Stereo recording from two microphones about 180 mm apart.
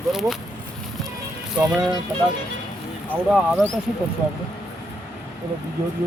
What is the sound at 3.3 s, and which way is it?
Speech, 5° right (ahead or behind).